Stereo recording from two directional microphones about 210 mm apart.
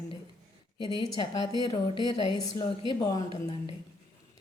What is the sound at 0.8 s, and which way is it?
A woman's voice, 20° left (ahead or behind).